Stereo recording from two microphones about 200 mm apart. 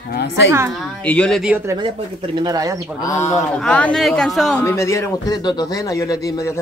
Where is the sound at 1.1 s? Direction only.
5° left (ahead or behind).